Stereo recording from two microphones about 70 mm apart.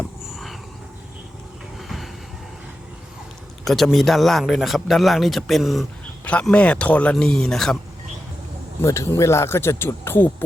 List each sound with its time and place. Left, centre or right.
3.6 s a man's voice: centre
6.5 s speech: centre
8.8 s speech: left